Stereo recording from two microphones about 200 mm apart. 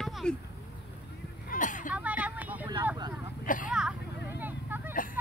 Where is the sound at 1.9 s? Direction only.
5° right (ahead or behind).